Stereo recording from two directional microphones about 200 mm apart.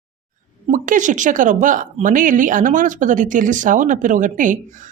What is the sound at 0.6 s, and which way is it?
Speech, 40° right (ahead or behind).